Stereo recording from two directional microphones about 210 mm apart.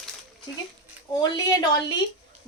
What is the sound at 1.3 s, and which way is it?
Speech, 20° left (ahead or behind).